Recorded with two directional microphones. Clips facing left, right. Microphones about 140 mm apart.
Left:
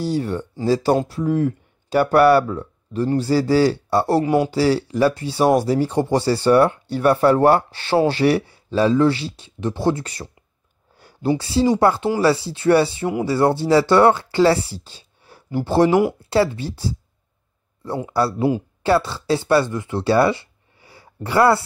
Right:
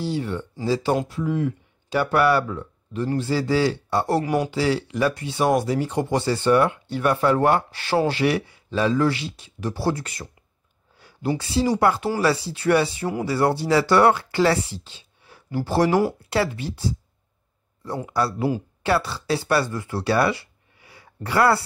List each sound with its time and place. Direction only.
0.0 s speech: 40° left (ahead or behind)
15.5 s speech: 25° left (ahead or behind)